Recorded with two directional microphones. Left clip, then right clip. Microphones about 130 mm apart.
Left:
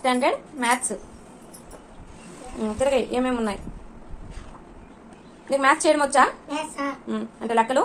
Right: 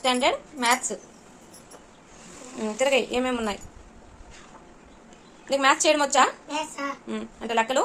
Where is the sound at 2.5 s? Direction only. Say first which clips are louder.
Left 1 dB; 25° right (ahead or behind).